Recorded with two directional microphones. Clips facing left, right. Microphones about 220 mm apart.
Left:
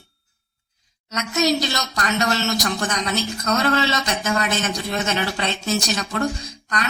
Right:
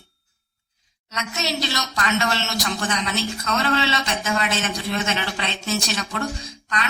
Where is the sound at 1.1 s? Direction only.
40° left (ahead or behind).